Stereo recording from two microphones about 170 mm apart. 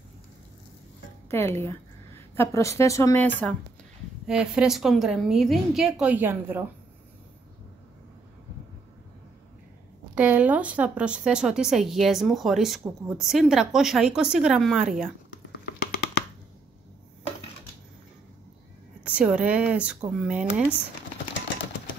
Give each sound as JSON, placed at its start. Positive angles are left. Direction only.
{"t": 1.3, "sound": "a woman's voice", "side_deg": 15}
{"t": 4.3, "sound": "speech", "side_deg": -5}
{"t": 10.1, "sound": "speech", "side_deg": -10}
{"t": 15.9, "sound": "a sound", "side_deg": 65}
{"t": 19.0, "sound": "speech", "side_deg": -5}